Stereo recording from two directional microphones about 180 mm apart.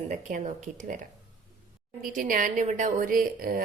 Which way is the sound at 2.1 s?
50° right (ahead or behind).